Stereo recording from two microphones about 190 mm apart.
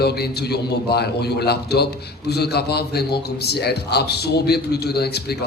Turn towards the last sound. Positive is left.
turn(degrees=60)  # may be behind; listen again after turning